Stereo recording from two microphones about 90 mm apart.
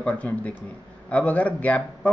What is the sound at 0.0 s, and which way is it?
Speech, 15° left (ahead or behind).